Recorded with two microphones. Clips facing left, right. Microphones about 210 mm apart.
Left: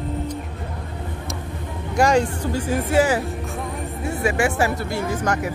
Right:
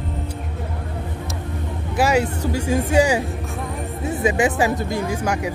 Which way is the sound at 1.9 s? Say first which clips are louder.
Left 1 dB; 5° right (ahead or behind).